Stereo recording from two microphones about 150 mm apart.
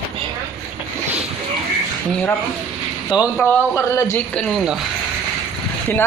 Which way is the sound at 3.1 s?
30° left (ahead or behind).